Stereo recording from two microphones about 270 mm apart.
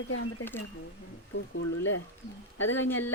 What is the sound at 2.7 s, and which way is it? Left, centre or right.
Speech, centre.